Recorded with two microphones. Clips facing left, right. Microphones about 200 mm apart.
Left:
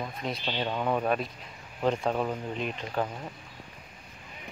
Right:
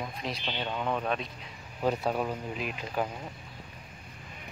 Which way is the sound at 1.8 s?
5° right (ahead or behind).